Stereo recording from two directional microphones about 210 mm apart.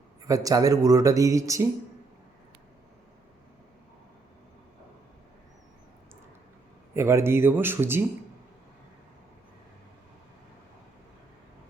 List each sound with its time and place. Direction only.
0.3 s speech: 15° right (ahead or behind)
6.9 s speech: 10° right (ahead or behind)